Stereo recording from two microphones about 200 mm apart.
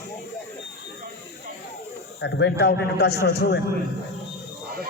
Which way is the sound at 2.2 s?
60° left (ahead or behind).